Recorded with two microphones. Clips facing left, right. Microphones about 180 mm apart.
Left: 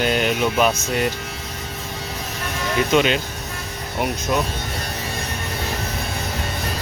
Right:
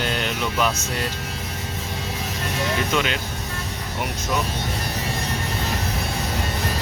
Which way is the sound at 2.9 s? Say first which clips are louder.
Left 9 dB; 20° left (ahead or behind).